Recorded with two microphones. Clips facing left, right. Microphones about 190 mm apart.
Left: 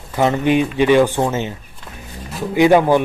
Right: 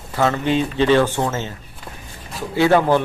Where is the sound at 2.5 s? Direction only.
15° left (ahead or behind).